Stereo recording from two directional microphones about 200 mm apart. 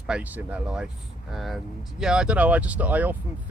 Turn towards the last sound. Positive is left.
turn(degrees=-10)  # may be behind; listen again after turning